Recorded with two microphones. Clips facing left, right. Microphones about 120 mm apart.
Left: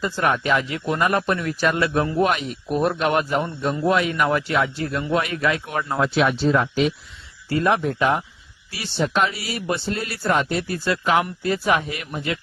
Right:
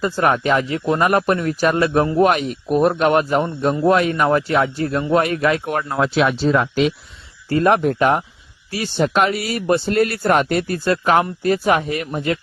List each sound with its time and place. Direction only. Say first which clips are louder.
0.0 s speech: right 4 dB; 40° right (ahead or behind)
2.3 s speech: right 5 dB; 45° right (ahead or behind)
6.0 s speech: right 2 dB; 90° right
7.6 s speech: right 5 dB; 45° right (ahead or behind)
9.1 s speech: right 5 dB; 60° right (ahead or behind)
11.2 s speech: right 5 dB; 40° right (ahead or behind)